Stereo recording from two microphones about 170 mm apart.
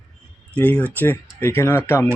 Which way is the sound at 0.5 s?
10° left (ahead or behind).